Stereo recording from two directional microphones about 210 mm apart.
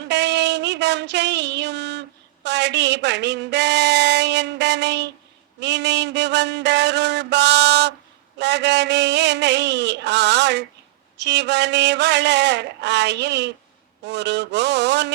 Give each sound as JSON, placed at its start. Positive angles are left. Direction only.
{"t": 0.1, "sound": "music", "side_deg": -55}
{"t": 5.5, "sound": "mantra", "side_deg": -55}